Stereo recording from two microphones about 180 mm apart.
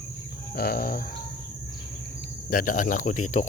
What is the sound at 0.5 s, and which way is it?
Chicken, 60° left (ahead or behind).